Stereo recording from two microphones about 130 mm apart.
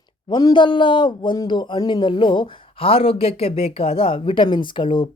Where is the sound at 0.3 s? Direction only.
35° left (ahead or behind).